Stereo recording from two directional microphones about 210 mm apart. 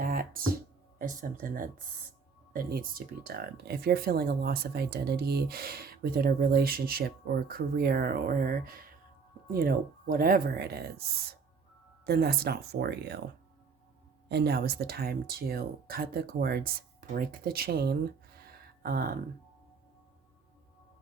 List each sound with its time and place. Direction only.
0.0 s music: 40° right (ahead or behind)
0.9 s speech: 40° right (ahead or behind)
14.3 s speech: 50° right (ahead or behind)